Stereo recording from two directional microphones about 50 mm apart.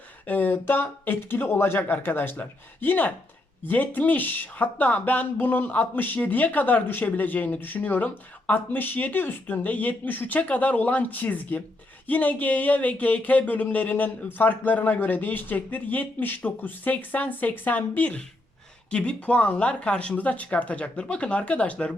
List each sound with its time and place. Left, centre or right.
0.3 s speech: left